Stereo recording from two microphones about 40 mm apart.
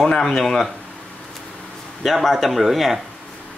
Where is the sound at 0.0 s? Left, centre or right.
Centre.